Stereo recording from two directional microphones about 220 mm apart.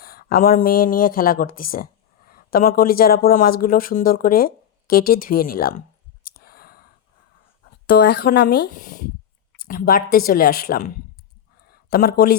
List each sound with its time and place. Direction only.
0.0 s speech: 45° left (ahead or behind)
6.2 s a sound: 45° left (ahead or behind)
7.9 s speech: 45° left (ahead or behind)